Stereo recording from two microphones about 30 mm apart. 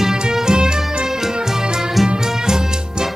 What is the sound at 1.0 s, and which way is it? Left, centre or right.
Music, centre.